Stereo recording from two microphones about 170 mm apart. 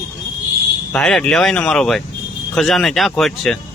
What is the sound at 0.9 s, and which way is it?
Speech, 5° left (ahead or behind).